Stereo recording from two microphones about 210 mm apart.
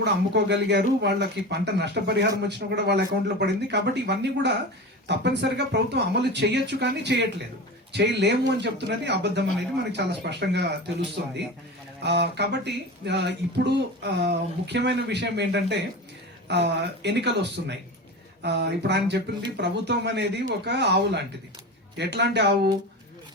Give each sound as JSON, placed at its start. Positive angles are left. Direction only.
{"t": 0.0, "sound": "speech", "side_deg": -55}